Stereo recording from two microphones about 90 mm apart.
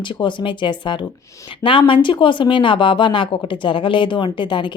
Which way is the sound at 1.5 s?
75° left (ahead or behind).